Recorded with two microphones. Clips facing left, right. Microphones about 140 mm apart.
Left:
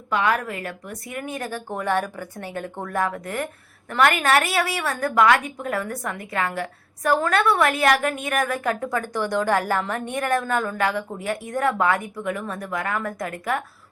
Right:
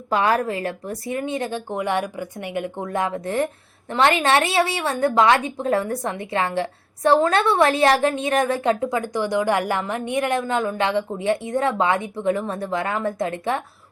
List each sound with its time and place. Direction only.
0.1 s a woman's voice: 30° right (ahead or behind)